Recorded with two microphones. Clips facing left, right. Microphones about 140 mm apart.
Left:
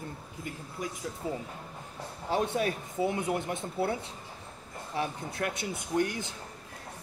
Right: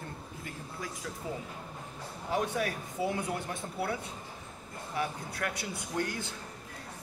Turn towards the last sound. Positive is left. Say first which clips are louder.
# left 5 dB
turn(degrees=20)  # may be behind; listen again after turning